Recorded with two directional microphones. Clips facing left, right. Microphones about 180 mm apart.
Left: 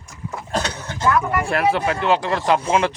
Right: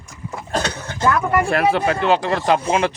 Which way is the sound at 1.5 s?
25° right (ahead or behind).